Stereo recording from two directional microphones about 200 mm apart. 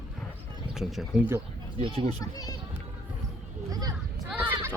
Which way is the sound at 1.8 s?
25° right (ahead or behind).